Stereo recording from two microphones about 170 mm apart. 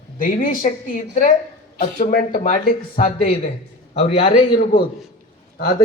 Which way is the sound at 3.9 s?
35° left (ahead or behind).